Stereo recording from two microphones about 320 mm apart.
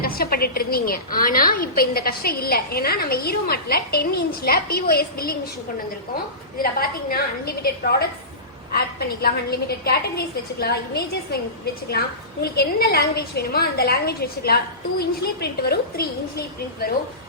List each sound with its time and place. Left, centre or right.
0.0 s a woman's voice: left
6.6 s a woman's voice: left